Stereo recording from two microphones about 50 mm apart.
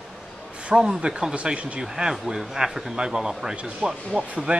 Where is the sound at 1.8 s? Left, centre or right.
Centre.